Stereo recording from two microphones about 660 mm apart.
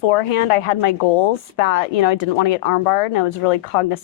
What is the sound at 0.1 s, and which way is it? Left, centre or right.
Speech, left.